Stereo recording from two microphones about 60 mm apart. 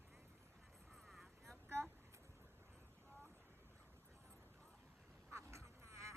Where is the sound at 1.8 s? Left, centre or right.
Right.